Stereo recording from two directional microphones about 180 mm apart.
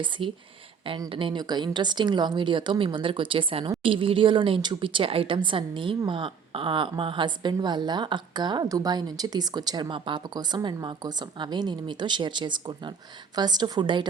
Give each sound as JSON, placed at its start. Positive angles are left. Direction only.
{"t": 0.0, "sound": "a woman's voice", "side_deg": -25}